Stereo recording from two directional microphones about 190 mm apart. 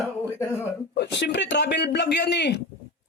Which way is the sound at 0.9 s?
60° left (ahead or behind).